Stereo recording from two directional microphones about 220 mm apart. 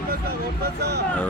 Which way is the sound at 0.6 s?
45° right (ahead or behind).